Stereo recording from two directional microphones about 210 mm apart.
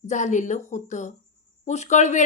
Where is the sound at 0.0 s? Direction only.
35° left (ahead or behind).